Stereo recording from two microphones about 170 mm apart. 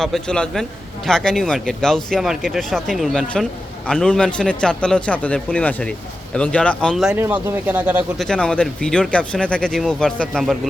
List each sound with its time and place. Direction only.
0.0 s speech: 5° left (ahead or behind)
7.2 s speech: 10° right (ahead or behind)
8.2 s speech: 5° left (ahead or behind)